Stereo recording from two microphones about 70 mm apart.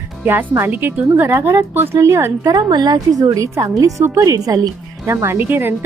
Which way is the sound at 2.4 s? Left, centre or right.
Right.